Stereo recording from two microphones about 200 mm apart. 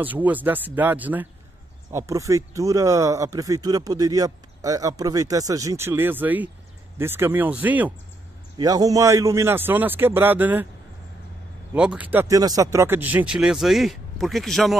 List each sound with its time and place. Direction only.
0.0 s speech: 10° right (ahead or behind)
8.5 s speech: 20° right (ahead or behind)
11.7 s speech: 5° right (ahead or behind)